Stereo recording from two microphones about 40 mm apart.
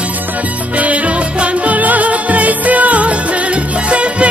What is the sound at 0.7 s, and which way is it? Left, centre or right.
Music, right.